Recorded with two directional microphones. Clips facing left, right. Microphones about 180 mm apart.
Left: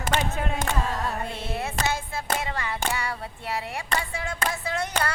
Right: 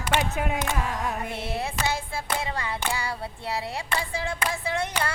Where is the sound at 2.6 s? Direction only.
25° right (ahead or behind).